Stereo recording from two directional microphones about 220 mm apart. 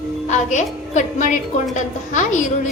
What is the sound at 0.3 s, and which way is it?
A woman's voice, 35° left (ahead or behind).